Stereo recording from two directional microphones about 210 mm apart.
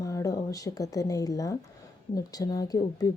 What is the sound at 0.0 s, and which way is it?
A woman's voice, 15° left (ahead or behind).